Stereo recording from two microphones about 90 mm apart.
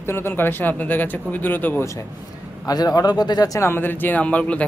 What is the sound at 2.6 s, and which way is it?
Speech, 45° left (ahead or behind).